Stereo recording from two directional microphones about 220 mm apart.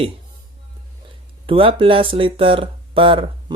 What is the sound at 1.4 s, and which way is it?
Speech, 25° right (ahead or behind).